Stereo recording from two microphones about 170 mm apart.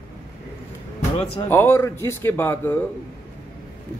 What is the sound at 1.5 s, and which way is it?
A man's voice, 15° left (ahead or behind).